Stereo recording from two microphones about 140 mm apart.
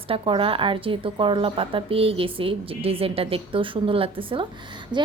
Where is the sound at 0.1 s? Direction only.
40° right (ahead or behind).